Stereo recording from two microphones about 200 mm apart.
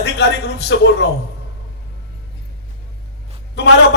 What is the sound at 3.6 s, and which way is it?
Speech, 60° left (ahead or behind).